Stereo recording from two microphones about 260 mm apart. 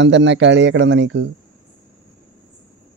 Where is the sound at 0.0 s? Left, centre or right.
Right.